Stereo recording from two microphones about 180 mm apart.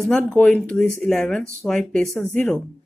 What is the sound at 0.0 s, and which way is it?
Speech, centre (ahead or behind).